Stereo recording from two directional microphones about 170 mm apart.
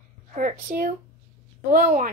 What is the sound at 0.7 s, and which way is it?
A woman's voice, 50° right (ahead or behind).